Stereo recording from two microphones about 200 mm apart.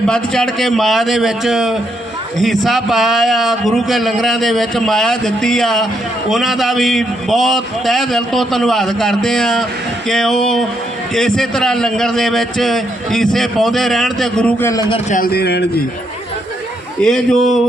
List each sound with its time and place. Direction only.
0.1 s a man's voice: 5° left (ahead or behind); by 15.0 s 20° left (ahead or behind)
15.1 s speech: 50° left (ahead or behind)
17.0 s a man's voice: 5° left (ahead or behind)